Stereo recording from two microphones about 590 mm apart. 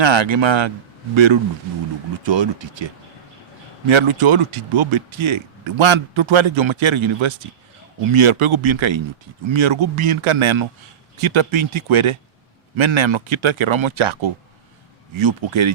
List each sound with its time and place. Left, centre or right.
0.0 s speech: right